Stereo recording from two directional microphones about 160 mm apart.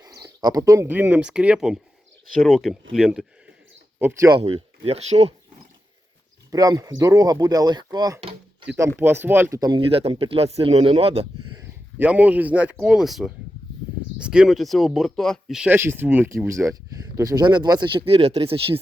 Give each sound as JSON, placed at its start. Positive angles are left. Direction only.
{"t": 0.2, "sound": "speech", "side_deg": -25}
{"t": 3.9, "sound": "speech", "side_deg": -15}
{"t": 4.3, "sound": "speech", "side_deg": -35}
{"t": 6.5, "sound": "speech", "side_deg": -25}
{"t": 8.6, "sound": "speech", "side_deg": -10}
{"t": 11.5, "sound": "speech", "side_deg": -15}